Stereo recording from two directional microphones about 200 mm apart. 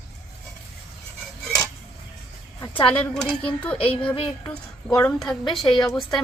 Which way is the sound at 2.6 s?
25° left (ahead or behind).